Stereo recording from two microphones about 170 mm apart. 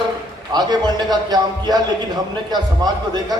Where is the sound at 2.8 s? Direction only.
25° right (ahead or behind).